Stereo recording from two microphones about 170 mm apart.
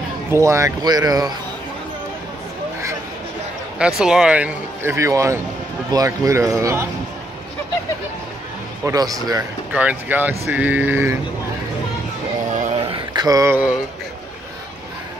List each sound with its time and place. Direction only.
0.3 s speech: 15° right (ahead or behind)
3.7 s speech: 5° right (ahead or behind)
8.8 s speech: 20° right (ahead or behind)
9.7 s speech: 10° right (ahead or behind)
12.7 s mantra: 30° right (ahead or behind)